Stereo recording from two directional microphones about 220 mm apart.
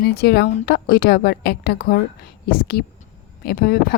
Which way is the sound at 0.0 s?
45° left (ahead or behind).